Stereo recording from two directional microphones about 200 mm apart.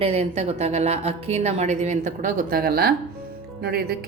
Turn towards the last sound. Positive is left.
turn(degrees=-50)  # may be behind; listen again after turning